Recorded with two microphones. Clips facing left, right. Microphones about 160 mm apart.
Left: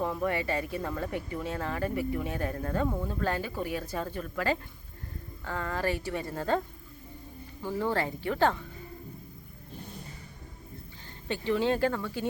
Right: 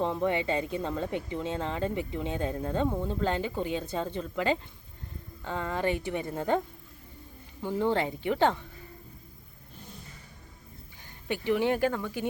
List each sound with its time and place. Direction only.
0.0 s speech: 20° right (ahead or behind)
7.6 s speech: 20° right (ahead or behind)
11.3 s speech: 15° right (ahead or behind)